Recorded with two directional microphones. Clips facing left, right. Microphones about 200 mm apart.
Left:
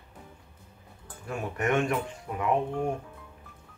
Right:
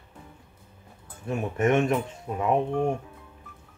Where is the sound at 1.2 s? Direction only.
25° right (ahead or behind).